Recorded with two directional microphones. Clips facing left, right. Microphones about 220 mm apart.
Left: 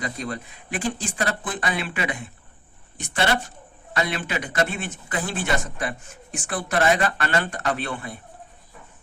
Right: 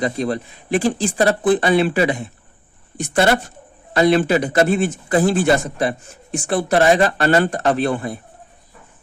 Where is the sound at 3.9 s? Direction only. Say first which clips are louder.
Right 12 dB; 35° right (ahead or behind).